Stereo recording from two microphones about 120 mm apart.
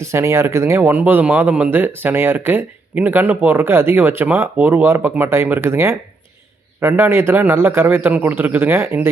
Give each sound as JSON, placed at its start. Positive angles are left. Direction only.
{"t": 0.0, "sound": "a man's voice", "side_deg": -20}